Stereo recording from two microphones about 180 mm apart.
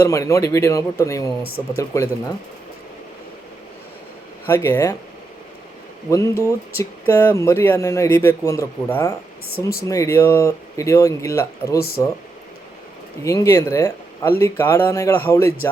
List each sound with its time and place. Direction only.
0.0 s speech: 15° left (ahead or behind)
4.4 s speech: 15° left (ahead or behind)
6.1 s speech: 15° left (ahead or behind)
13.2 s speech: 15° left (ahead or behind)